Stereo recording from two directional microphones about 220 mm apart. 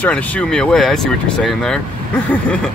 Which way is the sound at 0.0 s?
5° left (ahead or behind).